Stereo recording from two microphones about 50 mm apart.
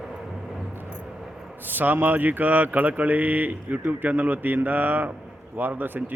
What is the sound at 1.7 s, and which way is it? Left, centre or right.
Speech, right.